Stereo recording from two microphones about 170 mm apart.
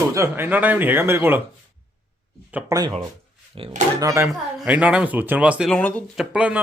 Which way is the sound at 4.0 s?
15° right (ahead or behind).